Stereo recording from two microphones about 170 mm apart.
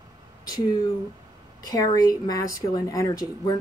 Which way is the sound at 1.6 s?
20° left (ahead or behind).